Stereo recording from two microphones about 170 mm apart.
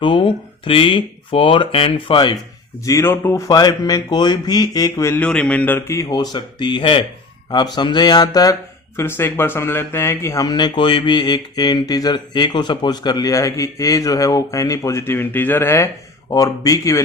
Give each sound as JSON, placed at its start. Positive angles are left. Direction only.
{"t": 0.0, "sound": "speech", "side_deg": 30}
{"t": 2.8, "sound": "speech", "side_deg": 15}